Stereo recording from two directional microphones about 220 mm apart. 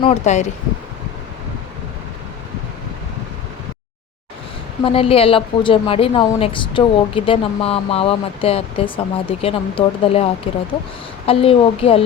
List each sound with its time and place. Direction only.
0.0 s speech: 30° left (ahead or behind)
4.8 s a woman's voice: 25° left (ahead or behind)